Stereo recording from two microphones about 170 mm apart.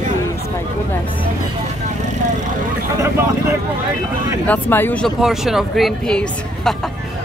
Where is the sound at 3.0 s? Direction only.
15° right (ahead or behind).